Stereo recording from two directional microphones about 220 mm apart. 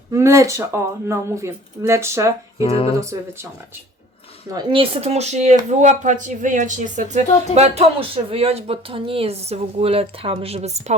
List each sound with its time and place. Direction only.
0.1 s speech: 15° right (ahead or behind)
2.6 s a sound: 25° left (ahead or behind)
4.5 s speech: 25° right (ahead or behind)